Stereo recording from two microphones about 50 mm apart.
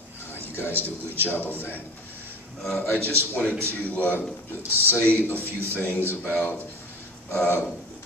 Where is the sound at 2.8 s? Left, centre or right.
Left.